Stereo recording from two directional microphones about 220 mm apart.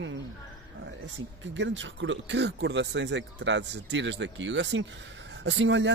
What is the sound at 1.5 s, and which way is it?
Speech, 55° right (ahead or behind).